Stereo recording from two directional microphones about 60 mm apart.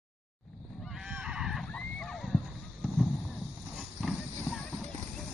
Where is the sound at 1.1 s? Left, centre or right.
Centre.